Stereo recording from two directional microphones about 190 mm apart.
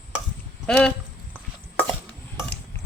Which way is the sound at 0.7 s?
5° left (ahead or behind).